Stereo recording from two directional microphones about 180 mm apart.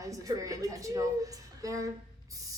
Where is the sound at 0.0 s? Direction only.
20° right (ahead or behind).